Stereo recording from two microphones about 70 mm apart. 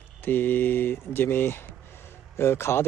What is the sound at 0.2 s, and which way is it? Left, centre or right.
A man's voice, left.